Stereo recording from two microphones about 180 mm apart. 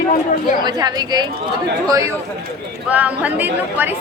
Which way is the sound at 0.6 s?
20° right (ahead or behind).